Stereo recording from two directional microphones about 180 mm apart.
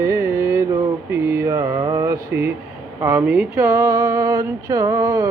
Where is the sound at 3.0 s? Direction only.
15° right (ahead or behind).